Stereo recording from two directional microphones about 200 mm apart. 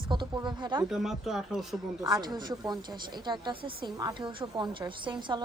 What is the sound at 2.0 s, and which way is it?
A woman's voice, 20° right (ahead or behind).